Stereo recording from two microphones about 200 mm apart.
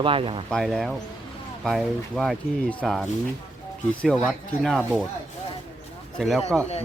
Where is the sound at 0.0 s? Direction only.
25° right (ahead or behind).